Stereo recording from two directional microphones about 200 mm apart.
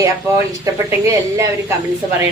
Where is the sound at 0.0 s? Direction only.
15° right (ahead or behind).